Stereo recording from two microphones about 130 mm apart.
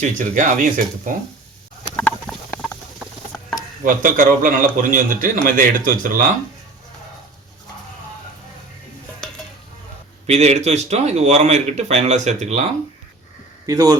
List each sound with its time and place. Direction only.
0.0 s a man's voice: 90° right
2.0 s a sound: 10° left (ahead or behind)
3.8 s a man's voice: 90° right
10.2 s speech: 60° right (ahead or behind)
13.7 s a man's voice: 30° right (ahead or behind)